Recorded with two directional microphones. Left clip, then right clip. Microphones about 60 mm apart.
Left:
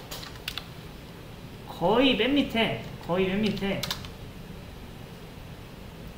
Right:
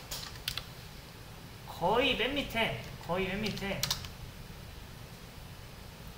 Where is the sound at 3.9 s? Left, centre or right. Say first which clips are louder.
Left 2 dB; centre.